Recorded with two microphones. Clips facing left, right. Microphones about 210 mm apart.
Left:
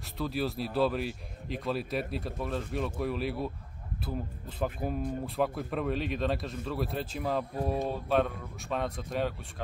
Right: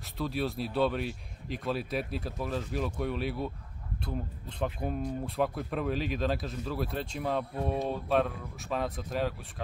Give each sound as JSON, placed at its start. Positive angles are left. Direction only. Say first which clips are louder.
{"t": 0.0, "sound": "speech", "louder": "even", "side_deg": 0}